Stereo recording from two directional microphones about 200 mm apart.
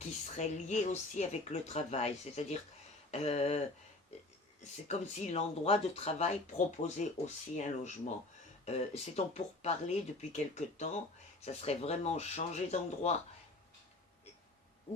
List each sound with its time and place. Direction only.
0.0 s speech: 35° left (ahead or behind)
4.9 s speech: 35° left (ahead or behind)